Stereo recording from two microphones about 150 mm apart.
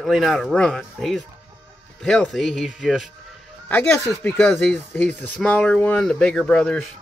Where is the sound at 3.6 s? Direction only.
10° left (ahead or behind).